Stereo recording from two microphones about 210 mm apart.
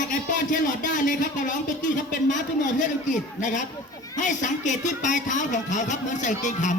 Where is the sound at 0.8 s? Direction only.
40° left (ahead or behind).